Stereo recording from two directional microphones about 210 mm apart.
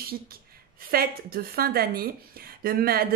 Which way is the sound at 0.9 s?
45° right (ahead or behind).